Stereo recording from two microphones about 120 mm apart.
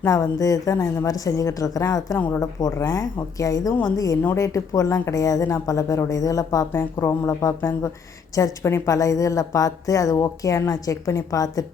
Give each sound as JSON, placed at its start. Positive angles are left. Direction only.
{"t": 0.0, "sound": "speech", "side_deg": 25}